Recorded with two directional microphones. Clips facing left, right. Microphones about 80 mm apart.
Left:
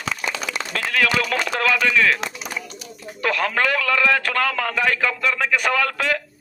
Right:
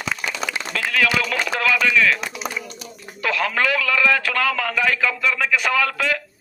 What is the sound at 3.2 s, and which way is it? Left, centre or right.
A man's voice, left.